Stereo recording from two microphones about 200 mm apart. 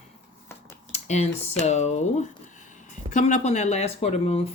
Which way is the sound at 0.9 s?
35° left (ahead or behind).